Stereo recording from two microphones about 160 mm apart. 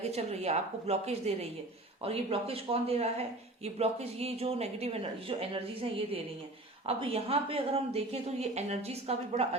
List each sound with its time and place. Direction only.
0.0 s speech: 40° right (ahead or behind)